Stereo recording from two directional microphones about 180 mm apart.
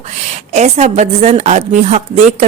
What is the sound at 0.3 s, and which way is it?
Speech, 35° right (ahead or behind).